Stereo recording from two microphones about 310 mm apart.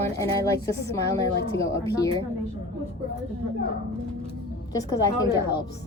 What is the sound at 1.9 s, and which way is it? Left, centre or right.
Speech, centre.